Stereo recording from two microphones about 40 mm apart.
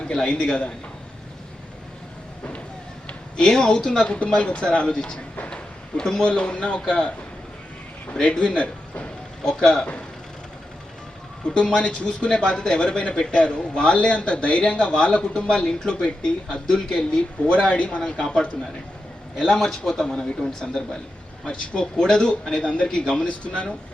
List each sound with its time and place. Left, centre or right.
0.0 s speech: left
3.3 s speech: centre
6.2 s speech: left
8.1 s speech: left
9.4 s speech: centre
11.5 s speech: left
19.4 s speech: centre; by 23.7 s left